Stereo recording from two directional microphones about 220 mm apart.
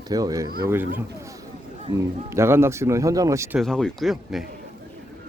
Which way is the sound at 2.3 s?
10° right (ahead or behind).